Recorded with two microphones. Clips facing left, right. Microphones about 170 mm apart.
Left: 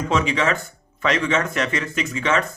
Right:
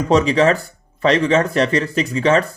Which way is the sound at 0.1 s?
35° right (ahead or behind).